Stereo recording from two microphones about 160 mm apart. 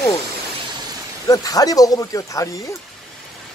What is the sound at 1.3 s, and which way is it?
Speech, 20° left (ahead or behind).